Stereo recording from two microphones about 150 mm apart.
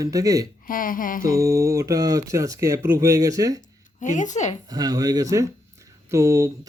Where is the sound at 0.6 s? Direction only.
70° left (ahead or behind).